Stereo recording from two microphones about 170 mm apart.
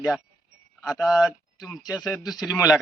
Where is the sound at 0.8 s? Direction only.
Centre (ahead or behind).